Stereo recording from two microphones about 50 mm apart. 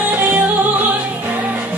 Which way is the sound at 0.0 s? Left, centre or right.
Right.